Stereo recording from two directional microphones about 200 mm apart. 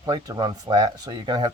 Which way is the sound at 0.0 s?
20° right (ahead or behind).